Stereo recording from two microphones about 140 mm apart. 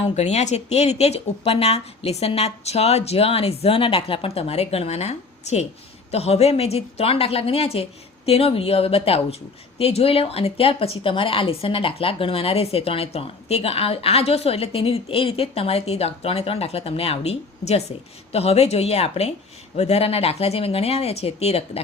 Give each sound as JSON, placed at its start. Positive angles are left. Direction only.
{"t": 0.0, "sound": "speech", "side_deg": 55}